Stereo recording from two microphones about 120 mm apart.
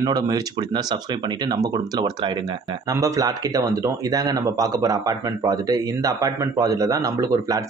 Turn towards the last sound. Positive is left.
turn(degrees=-30)  # may be behind; listen again after turning